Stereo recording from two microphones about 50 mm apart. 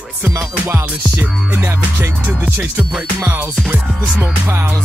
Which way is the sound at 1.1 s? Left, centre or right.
Right.